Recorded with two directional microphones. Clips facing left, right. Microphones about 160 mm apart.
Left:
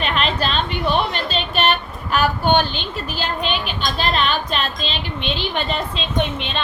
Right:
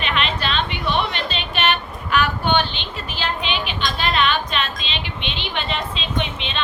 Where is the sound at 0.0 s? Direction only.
40° left (ahead or behind).